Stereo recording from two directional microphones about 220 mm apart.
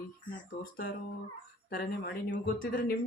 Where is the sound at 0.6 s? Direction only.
40° left (ahead or behind).